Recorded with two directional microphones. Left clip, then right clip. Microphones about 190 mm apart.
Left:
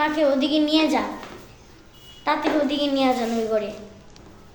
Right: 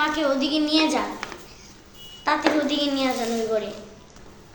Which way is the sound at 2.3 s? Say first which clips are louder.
Even; 10° left (ahead or behind).